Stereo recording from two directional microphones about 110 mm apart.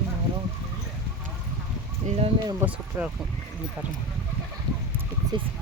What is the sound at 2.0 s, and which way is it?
Speech, 70° right (ahead or behind).